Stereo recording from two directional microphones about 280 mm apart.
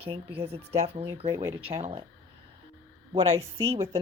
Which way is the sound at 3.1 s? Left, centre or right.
Right.